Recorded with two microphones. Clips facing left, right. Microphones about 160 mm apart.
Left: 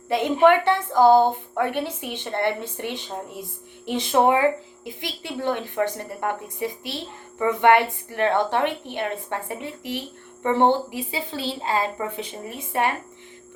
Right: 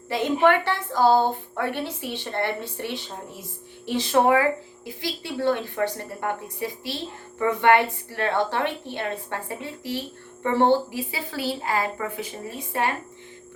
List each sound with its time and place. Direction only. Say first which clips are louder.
0.1 s a woman's voice: left 3 dB; 20° left (ahead or behind)